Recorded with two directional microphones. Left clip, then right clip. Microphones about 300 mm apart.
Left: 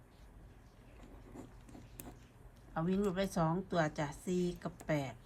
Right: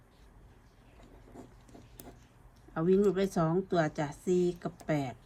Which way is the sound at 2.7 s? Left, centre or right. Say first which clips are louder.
Right 9 dB; centre.